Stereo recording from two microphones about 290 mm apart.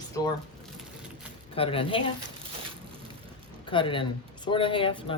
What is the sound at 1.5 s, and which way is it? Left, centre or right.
Speech, centre.